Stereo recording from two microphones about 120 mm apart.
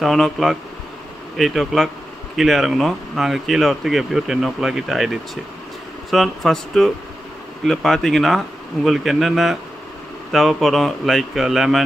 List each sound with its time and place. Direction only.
0.0 s speech: centre (ahead or behind)